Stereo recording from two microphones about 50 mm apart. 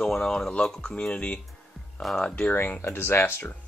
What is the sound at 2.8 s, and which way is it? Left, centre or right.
Speech, left.